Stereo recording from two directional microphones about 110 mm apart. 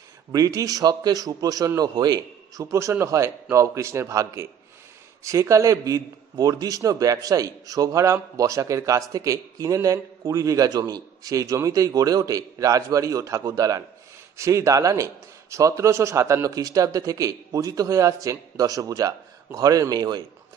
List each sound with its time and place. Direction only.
0.3 s a man's voice: 35° right (ahead or behind)